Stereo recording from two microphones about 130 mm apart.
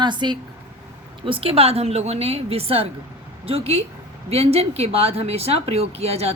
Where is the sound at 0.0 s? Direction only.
35° right (ahead or behind).